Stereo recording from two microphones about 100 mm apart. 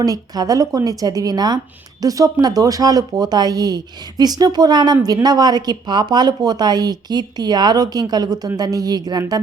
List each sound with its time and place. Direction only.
0.0 s speech: 40° right (ahead or behind)